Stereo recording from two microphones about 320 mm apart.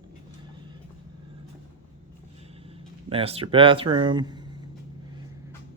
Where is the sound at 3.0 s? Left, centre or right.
Centre.